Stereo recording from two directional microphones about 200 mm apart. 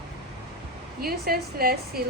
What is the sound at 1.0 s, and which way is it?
Speech, 50° right (ahead or behind).